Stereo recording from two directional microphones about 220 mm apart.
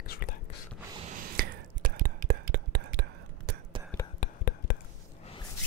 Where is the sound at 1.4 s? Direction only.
40° right (ahead or behind).